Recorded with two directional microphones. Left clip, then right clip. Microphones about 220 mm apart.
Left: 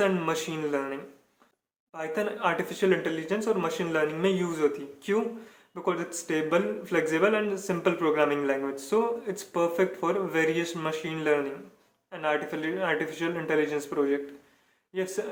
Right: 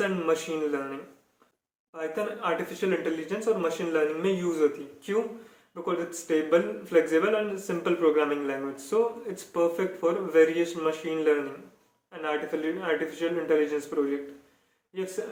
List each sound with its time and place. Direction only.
0.0 s a man's voice: 40° left (ahead or behind)
2.0 s a man's voice: 40° left (ahead or behind)
5.8 s a man's voice: 40° left (ahead or behind)